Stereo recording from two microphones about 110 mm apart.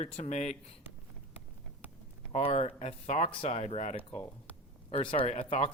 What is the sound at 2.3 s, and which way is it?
Speech, 70° left (ahead or behind).